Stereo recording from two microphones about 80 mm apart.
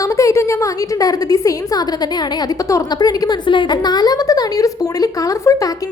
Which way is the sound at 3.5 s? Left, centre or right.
Left.